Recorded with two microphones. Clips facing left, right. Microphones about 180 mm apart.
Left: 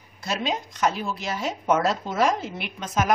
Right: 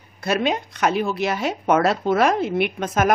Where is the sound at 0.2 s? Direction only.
60° right (ahead or behind).